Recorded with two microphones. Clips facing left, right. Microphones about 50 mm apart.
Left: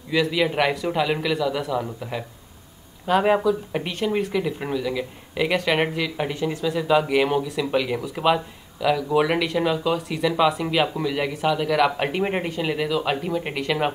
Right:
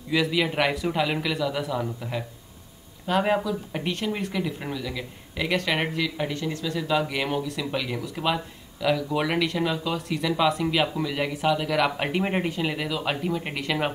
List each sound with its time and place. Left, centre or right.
0.1 s speech: centre